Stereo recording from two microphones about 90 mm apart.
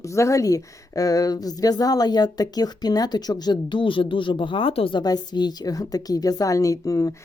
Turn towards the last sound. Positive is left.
turn(degrees=40)  # may be behind; listen again after turning